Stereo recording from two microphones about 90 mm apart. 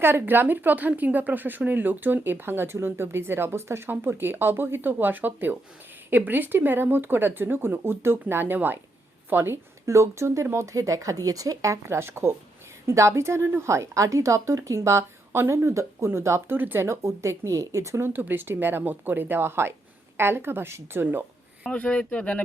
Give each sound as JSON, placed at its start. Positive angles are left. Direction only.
{"t": 0.0, "sound": "a woman's voice", "side_deg": -25}
{"t": 21.7, "sound": "speech", "side_deg": 10}